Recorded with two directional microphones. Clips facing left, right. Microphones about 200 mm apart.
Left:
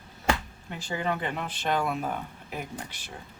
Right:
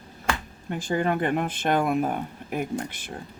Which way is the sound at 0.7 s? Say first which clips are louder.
Right 6 dB; 50° right (ahead or behind).